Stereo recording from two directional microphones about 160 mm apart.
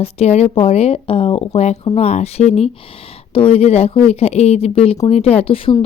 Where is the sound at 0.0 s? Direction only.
40° left (ahead or behind).